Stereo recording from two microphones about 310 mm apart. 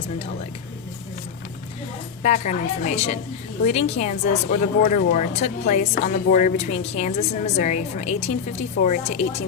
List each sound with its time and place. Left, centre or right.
2.2 s a woman's voice: left